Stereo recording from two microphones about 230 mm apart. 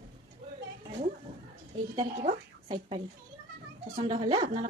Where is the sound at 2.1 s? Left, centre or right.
Right.